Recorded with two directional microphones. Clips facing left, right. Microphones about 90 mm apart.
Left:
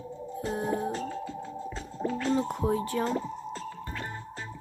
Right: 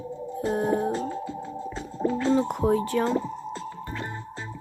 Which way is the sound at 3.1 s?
35° right (ahead or behind).